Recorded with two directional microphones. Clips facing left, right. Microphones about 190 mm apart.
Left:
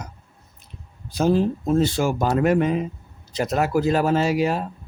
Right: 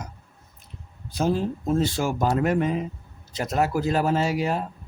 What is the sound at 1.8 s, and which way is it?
A man's voice, 90° left.